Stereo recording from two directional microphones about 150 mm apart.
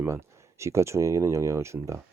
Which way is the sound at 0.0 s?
20° right (ahead or behind).